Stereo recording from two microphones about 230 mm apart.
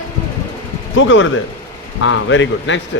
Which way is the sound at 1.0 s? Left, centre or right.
Left.